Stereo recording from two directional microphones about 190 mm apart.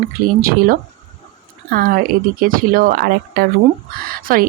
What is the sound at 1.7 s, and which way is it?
A woman's voice, 50° right (ahead or behind).